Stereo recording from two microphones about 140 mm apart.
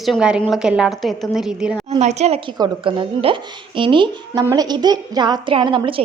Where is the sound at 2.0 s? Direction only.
55° right (ahead or behind).